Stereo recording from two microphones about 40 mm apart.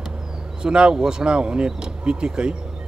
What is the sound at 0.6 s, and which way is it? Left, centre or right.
A man's voice, right.